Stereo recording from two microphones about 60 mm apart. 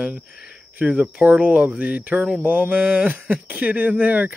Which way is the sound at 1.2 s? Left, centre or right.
Right.